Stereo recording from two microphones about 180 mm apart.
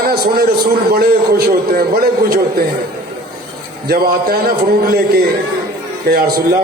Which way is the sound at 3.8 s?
60° right (ahead or behind).